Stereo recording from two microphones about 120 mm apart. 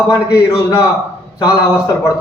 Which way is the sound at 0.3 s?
30° left (ahead or behind).